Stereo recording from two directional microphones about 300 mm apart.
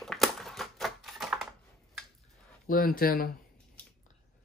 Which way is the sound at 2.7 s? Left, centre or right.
Left.